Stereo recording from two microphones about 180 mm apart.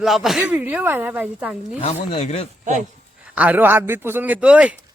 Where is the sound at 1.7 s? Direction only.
35° left (ahead or behind).